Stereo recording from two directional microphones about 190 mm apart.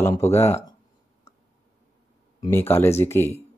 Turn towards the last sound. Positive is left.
turn(degrees=15)  # may be behind; listen again after turning